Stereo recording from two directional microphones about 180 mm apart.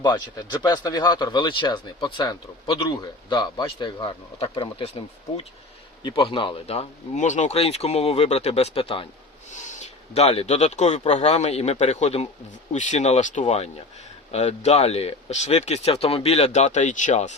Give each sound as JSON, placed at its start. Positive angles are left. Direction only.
{"t": 0.0, "sound": "speech", "side_deg": 25}
{"t": 9.5, "sound": "speech", "side_deg": 40}